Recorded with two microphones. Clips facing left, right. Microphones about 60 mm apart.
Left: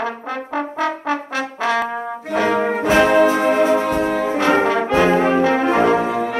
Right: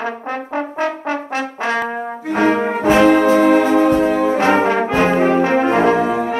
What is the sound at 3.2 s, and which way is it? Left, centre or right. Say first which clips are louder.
Brass instrument: right 2 dB; right.